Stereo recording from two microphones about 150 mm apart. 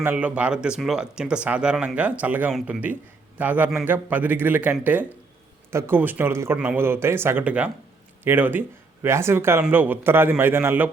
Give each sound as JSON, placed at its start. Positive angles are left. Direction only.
{"t": 0.0, "sound": "speech", "side_deg": -10}